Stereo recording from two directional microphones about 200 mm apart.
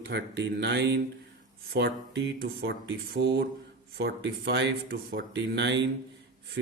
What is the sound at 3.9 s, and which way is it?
Speech, 55° right (ahead or behind).